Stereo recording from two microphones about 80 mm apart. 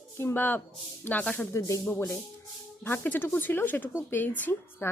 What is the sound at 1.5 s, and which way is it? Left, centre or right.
Speech, left.